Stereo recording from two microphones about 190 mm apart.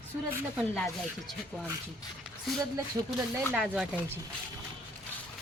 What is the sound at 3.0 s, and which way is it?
Speech, 15° right (ahead or behind).